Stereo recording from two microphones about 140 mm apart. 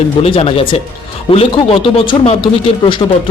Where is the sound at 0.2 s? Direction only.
45° left (ahead or behind).